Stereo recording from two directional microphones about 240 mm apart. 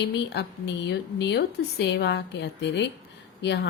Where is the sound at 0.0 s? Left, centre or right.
Left.